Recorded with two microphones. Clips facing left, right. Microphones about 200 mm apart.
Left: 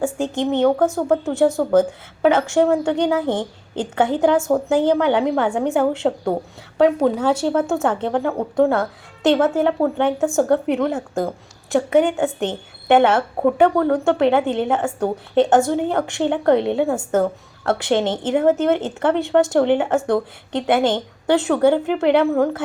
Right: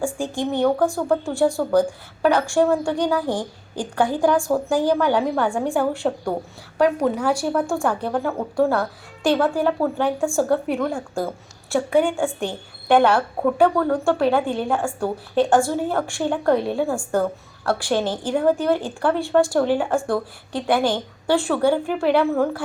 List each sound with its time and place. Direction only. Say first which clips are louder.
0.0 s speech: left 3 dB; 20° left (ahead or behind)